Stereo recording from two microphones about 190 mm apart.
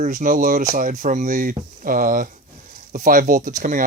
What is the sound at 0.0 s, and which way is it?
Speech, 45° right (ahead or behind).